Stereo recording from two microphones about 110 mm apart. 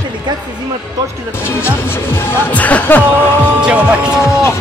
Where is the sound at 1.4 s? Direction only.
20° left (ahead or behind).